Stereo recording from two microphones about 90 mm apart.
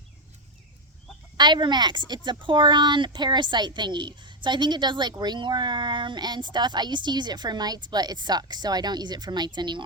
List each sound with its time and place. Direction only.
1.4 s speech: 55° right (ahead or behind)